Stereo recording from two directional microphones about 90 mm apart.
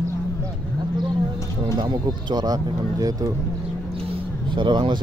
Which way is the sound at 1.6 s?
55° right (ahead or behind).